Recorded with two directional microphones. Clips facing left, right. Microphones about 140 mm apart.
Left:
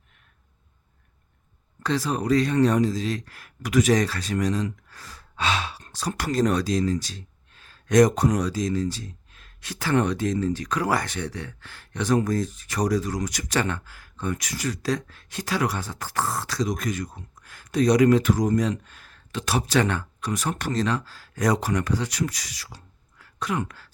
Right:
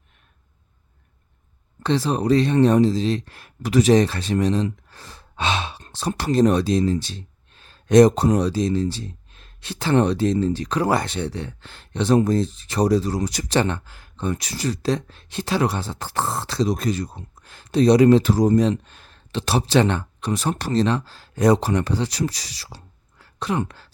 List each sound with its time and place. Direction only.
1.8 s speech: 25° right (ahead or behind)